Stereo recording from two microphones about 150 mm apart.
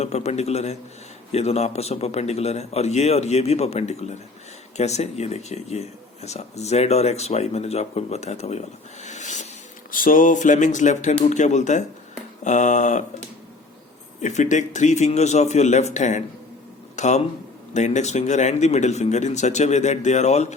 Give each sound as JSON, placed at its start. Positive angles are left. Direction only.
{"t": 0.0, "sound": "speech", "side_deg": 45}
{"t": 9.9, "sound": "speech", "side_deg": 65}
{"t": 14.2, "sound": "speech", "side_deg": 55}